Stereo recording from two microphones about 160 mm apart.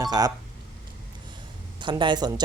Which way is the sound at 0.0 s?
25° right (ahead or behind).